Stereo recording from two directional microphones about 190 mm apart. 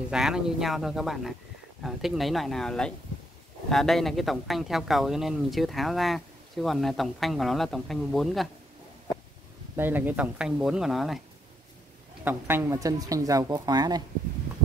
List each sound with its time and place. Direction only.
0.1 s speech: centre (ahead or behind)
9.8 s speech: 10° right (ahead or behind)
12.3 s speech: 10° right (ahead or behind)